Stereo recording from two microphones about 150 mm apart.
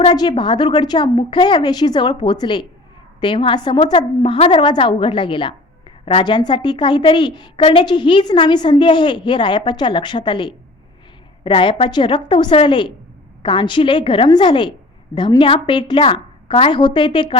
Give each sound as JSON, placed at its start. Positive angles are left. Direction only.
{"t": 0.1, "sound": "a woman's voice", "side_deg": 30}